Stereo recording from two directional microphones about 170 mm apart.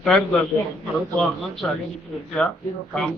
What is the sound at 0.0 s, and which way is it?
A man's voice, 5° left (ahead or behind).